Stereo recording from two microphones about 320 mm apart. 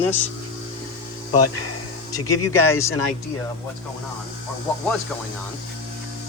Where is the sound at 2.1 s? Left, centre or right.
Centre.